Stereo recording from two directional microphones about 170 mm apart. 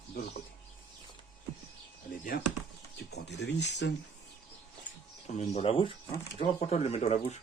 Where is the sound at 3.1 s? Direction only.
90° left.